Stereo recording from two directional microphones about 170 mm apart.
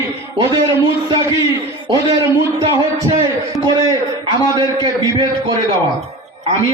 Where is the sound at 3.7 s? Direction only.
25° right (ahead or behind).